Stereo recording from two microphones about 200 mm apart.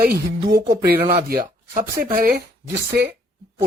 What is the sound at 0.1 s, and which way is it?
Speech, 55° right (ahead or behind).